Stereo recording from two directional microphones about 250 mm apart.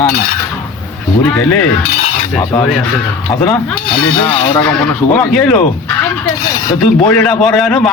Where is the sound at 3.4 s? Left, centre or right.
Centre.